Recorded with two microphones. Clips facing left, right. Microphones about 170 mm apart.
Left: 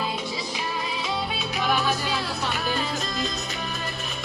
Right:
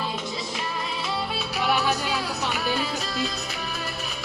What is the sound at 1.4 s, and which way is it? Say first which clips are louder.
Music: right 1 dB; 10° right (ahead or behind).